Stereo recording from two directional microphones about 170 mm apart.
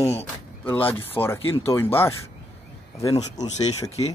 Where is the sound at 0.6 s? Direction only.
10° left (ahead or behind).